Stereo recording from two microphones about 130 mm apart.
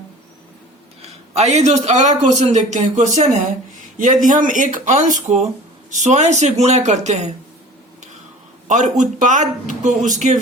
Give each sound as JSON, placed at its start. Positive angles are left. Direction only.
{"t": 1.0, "sound": "a man's voice", "side_deg": -55}
{"t": 4.3, "sound": "a man's voice", "side_deg": -90}
{"t": 8.6, "sound": "speech", "side_deg": -70}